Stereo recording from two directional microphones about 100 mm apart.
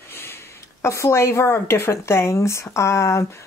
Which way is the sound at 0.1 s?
25° left (ahead or behind).